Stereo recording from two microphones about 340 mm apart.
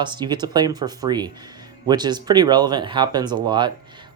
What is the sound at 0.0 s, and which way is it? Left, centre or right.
Speech, centre.